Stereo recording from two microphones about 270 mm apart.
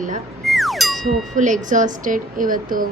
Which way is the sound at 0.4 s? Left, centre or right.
Centre.